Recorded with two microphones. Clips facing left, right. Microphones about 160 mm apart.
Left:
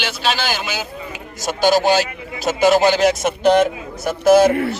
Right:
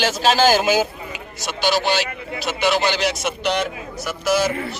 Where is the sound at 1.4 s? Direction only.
45° left (ahead or behind).